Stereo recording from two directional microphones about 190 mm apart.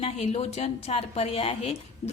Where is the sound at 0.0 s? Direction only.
35° left (ahead or behind).